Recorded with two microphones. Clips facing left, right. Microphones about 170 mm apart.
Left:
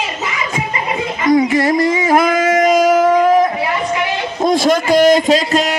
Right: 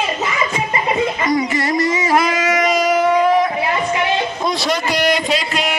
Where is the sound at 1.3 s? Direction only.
50° left (ahead or behind).